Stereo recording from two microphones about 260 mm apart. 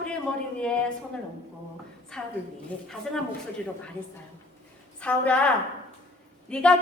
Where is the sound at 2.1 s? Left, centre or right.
Centre.